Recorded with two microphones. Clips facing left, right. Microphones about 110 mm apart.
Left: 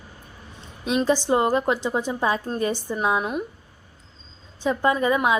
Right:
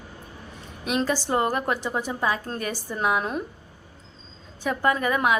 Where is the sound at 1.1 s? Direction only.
20° left (ahead or behind).